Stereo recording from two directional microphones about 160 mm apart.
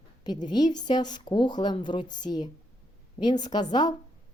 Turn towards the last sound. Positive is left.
turn(degrees=25)  # may be behind; listen again after turning